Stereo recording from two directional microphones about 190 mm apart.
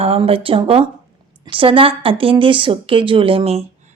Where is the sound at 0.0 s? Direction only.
30° right (ahead or behind).